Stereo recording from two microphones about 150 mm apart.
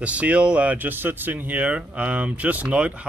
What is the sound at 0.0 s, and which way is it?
Speech, 10° right (ahead or behind).